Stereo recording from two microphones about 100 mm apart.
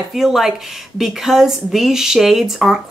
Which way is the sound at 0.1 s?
5° right (ahead or behind).